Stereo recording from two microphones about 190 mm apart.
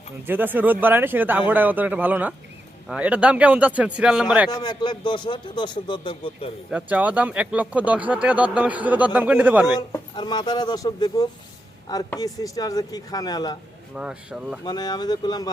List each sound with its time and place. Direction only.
0.3 s speech: 10° right (ahead or behind)
4.5 s speech: 20° left (ahead or behind)
6.7 s speech: 5° right (ahead or behind)
10.2 s speech: 20° left (ahead or behind)
13.9 s speech: 5° right (ahead or behind)
14.6 s speech: 20° left (ahead or behind)